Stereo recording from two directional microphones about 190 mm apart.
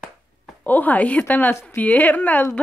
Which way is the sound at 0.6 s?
10° left (ahead or behind).